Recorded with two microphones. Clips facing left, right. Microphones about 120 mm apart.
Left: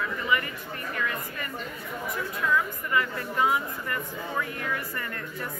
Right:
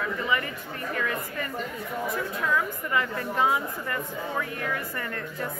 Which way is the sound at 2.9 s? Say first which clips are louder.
Even; 25° right (ahead or behind).